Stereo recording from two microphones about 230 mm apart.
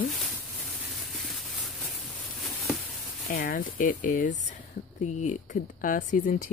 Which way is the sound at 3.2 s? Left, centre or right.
Left.